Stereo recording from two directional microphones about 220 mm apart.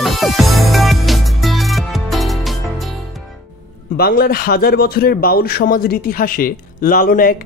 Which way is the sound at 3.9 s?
45° left (ahead or behind).